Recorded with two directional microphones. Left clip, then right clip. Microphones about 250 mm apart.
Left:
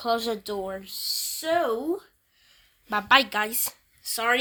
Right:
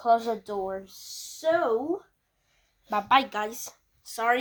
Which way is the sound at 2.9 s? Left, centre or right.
Left.